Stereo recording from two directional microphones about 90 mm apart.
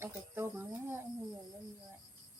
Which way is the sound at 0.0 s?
25° right (ahead or behind).